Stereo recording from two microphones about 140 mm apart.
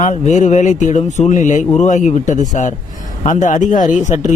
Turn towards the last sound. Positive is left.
turn(degrees=60)  # may be behind; listen again after turning